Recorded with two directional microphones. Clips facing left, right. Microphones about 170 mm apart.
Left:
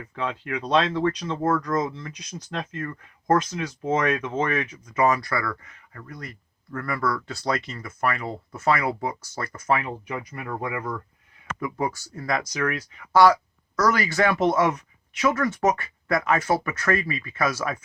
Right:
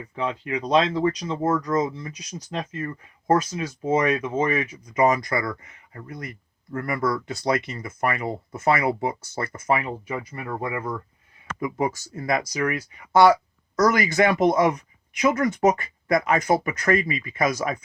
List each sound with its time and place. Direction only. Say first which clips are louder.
0.2 s speech: right 2 dB; 15° right (ahead or behind)
11.9 s speech: right 2 dB; 20° right (ahead or behind)